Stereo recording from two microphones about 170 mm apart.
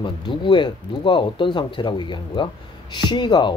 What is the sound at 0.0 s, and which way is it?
Speech, 30° left (ahead or behind).